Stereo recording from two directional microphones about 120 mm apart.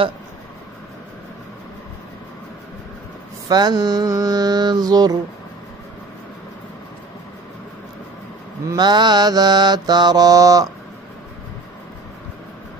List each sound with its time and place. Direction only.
3.4 s mantra: 35° right (ahead or behind)
8.6 s mantra: 35° right (ahead or behind)